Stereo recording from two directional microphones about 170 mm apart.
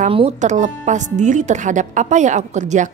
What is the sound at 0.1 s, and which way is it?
Speech, 40° right (ahead or behind).